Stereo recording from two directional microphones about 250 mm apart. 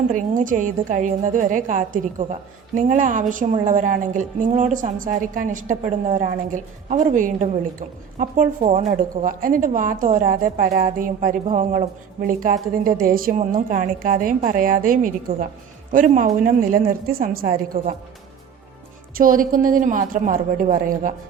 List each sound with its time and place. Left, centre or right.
0.1 s a woman's voice: right
19.1 s a woman's voice: right